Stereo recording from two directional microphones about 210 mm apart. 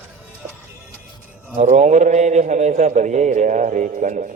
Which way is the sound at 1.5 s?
35° right (ahead or behind).